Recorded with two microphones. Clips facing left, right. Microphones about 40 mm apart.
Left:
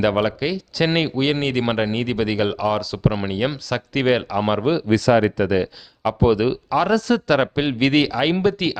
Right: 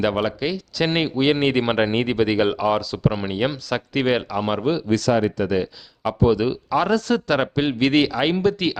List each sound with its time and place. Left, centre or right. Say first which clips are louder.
0.3 s speech: left 1 dB; centre
1.9 s speech: right 2 dB; right
2.1 s speech: right 2 dB; centre
3.0 s speech: left 1 dB; centre
3.3 s speech: even; centre
4.4 s speech: left 2 dB; centre
6.7 s speech: left 1 dB; centre
7.4 s speech: even; centre
7.8 s speech: left 1 dB; centre